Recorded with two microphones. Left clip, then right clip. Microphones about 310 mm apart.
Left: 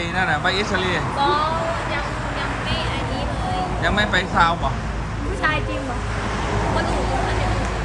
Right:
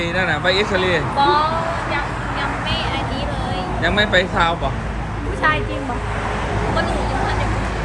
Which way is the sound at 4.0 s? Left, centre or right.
Centre.